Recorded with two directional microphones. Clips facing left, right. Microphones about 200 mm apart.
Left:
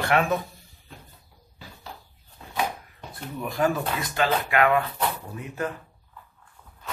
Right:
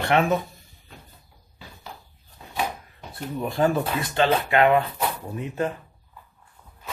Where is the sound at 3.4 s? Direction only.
30° right (ahead or behind).